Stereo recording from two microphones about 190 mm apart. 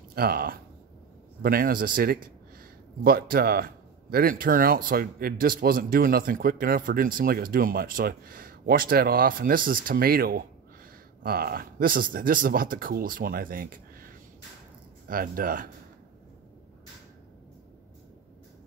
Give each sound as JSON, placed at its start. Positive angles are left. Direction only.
{"t": 0.1, "sound": "a man's voice", "side_deg": -55}